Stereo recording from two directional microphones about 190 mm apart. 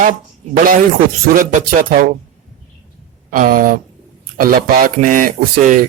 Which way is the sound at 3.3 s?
45° right (ahead or behind).